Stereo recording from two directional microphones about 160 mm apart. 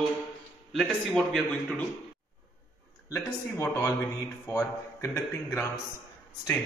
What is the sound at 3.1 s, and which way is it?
Mantra, 15° left (ahead or behind).